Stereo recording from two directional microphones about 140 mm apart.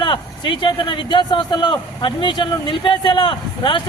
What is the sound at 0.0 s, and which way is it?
A man's voice, 35° left (ahead or behind).